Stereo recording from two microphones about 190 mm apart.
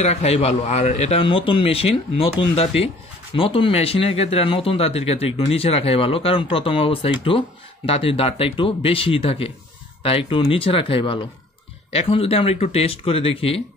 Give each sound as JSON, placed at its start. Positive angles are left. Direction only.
{"t": 0.0, "sound": "a man's voice", "side_deg": 35}